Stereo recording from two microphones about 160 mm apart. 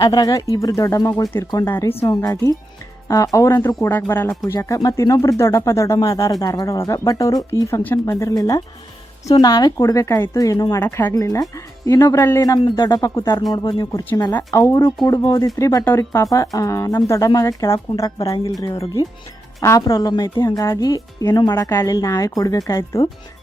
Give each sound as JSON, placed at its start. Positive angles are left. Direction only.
{"t": 0.0, "sound": "speech", "side_deg": 25}
{"t": 1.5, "sound": "speech", "side_deg": 25}
{"t": 14.3, "sound": "speech", "side_deg": 15}